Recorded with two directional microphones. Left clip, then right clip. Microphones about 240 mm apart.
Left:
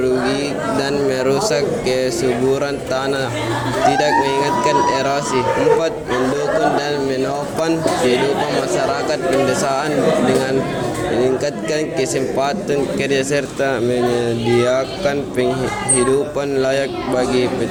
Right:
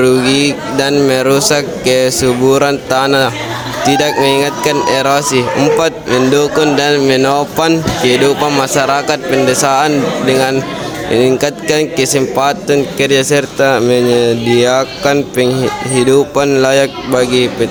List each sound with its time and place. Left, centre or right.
0.0 s a man's voice: right